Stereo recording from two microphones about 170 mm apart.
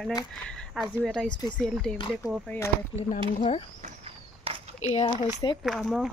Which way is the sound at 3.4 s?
40° left (ahead or behind).